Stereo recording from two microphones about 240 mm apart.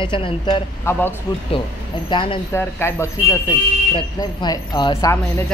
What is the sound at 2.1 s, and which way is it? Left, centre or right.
Speech, left.